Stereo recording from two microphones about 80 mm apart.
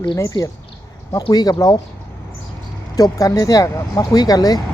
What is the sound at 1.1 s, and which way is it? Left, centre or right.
Speech, left.